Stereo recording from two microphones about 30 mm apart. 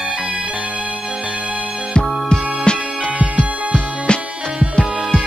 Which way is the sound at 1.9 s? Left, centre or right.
Left.